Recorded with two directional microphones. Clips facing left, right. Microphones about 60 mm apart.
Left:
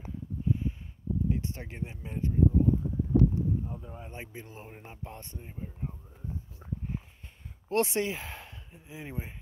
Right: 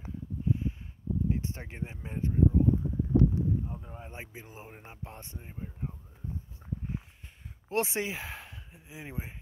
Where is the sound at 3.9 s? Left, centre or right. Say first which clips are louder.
Left 1 dB; centre.